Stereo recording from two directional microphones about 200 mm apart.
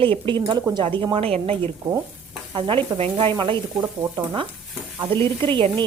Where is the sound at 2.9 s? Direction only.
30° right (ahead or behind).